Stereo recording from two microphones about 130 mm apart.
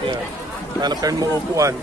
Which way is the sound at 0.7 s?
30° right (ahead or behind).